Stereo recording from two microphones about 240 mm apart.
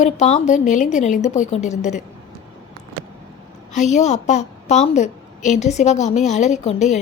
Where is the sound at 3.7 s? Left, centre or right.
Left.